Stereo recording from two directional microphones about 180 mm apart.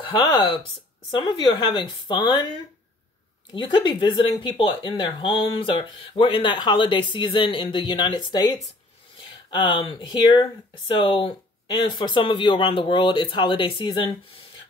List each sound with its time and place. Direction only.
1.1 s speech: 25° left (ahead or behind)
3.5 s speech: 25° left (ahead or behind)
9.5 s speech: 25° left (ahead or behind)